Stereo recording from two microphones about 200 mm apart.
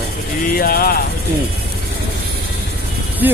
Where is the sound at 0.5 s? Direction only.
50° left (ahead or behind).